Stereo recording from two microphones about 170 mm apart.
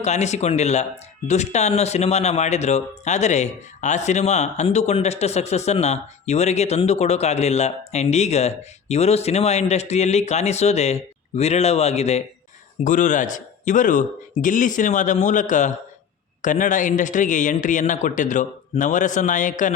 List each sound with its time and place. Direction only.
0.0 s speech: 40° left (ahead or behind)